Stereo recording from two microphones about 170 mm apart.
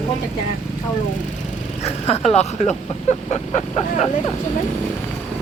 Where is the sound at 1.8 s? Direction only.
40° left (ahead or behind).